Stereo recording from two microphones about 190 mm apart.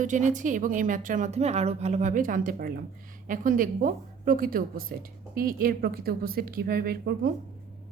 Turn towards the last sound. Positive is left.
turn(degrees=-50)  # may be behind; listen again after turning